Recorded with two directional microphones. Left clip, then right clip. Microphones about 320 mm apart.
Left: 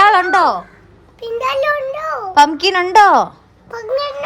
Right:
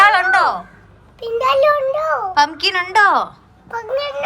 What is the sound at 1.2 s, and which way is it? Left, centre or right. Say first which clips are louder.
A child's voice: right 3 dB; centre.